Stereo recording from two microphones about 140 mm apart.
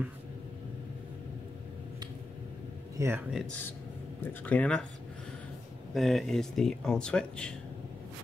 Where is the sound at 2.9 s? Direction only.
15° right (ahead or behind).